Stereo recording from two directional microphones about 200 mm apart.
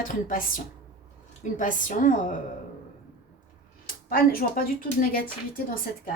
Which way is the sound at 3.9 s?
45° left (ahead or behind).